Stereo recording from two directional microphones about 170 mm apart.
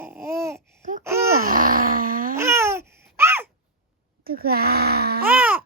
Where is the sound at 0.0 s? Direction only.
15° right (ahead or behind).